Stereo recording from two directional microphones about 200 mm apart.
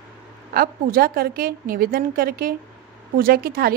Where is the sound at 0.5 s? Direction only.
45° right (ahead or behind).